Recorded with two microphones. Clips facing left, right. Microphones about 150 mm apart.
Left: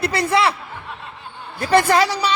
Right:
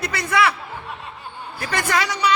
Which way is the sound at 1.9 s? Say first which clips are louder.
Left 4 dB; 30° left (ahead or behind).